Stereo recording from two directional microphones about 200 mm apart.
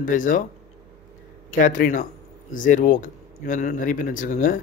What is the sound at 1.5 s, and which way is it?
Speech, 40° left (ahead or behind).